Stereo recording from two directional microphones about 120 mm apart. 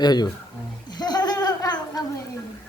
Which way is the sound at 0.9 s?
35° left (ahead or behind).